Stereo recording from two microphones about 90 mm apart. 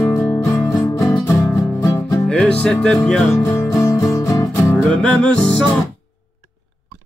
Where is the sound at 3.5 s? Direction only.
35° left (ahead or behind).